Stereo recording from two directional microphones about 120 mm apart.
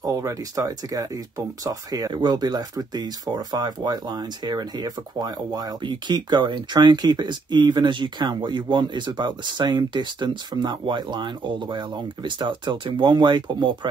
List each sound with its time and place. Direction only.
0.0 s speech: 30° right (ahead or behind)